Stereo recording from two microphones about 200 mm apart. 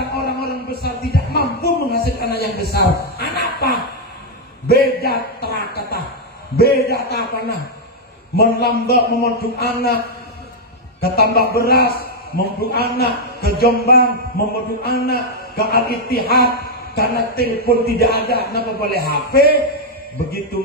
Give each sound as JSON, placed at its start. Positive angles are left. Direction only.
{"t": 0.1, "sound": "a sound", "side_deg": 50}
{"t": 6.5, "sound": "a man's voice", "side_deg": 50}
{"t": 11.0, "sound": "a man's voice", "side_deg": 50}